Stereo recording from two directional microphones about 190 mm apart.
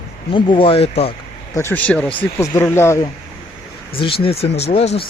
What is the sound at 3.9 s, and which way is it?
Speech, 30° left (ahead or behind).